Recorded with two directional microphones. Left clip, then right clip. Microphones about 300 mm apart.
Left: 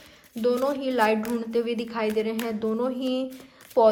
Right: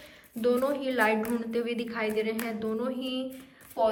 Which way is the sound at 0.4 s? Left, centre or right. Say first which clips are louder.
Left 2 dB; centre.